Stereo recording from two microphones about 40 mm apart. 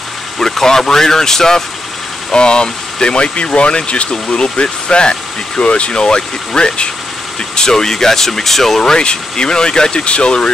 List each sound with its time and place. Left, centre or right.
0.4 s speech: centre
8.9 s speech: left